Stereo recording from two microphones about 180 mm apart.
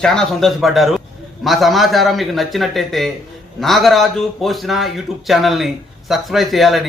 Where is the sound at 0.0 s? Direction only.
Centre (ahead or behind).